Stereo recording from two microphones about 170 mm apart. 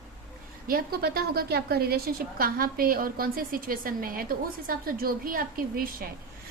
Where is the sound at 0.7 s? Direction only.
65° right (ahead or behind).